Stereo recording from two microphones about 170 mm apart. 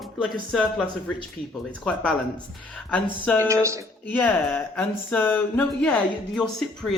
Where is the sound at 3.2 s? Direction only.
10° left (ahead or behind).